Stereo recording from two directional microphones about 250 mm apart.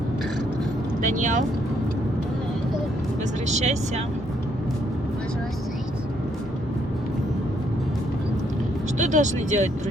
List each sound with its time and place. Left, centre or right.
1.0 s speech: right
3.4 s speech: right
9.0 s speech: right